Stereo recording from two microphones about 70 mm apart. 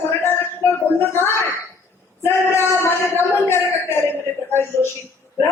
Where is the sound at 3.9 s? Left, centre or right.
Left.